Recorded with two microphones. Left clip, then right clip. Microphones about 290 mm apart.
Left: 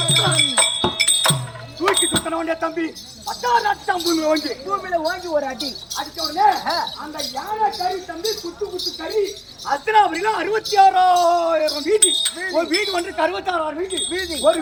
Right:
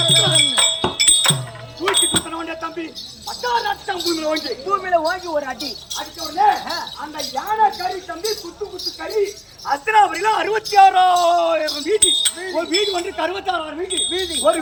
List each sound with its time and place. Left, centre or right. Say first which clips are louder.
0.3 s music: right 2 dB; centre
1.8 s speech: even; centre
4.7 s speech: right 4 dB; centre
5.5 s speech: left 1 dB; centre